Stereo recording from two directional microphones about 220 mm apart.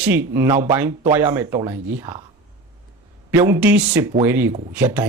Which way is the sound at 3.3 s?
10° right (ahead or behind).